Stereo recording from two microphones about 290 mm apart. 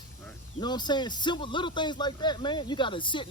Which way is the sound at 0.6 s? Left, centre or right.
Centre.